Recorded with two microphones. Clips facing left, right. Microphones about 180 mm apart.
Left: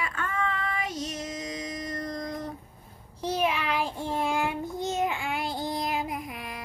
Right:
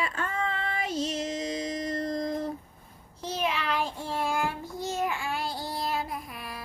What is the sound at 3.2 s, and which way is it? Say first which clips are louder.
Child singing: left 3 dB; 15° left (ahead or behind).